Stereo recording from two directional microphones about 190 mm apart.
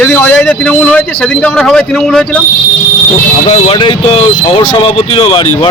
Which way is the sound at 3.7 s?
25° left (ahead or behind).